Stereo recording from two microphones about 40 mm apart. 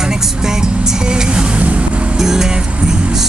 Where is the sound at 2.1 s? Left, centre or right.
Centre.